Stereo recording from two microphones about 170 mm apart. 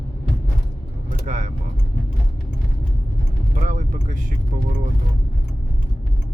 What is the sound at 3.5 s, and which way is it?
Vehicle, 45° right (ahead or behind).